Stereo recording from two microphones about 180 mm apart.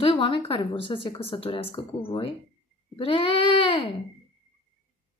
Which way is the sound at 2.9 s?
30° left (ahead or behind).